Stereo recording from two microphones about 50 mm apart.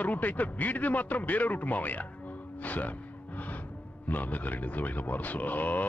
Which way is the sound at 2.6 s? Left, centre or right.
Left.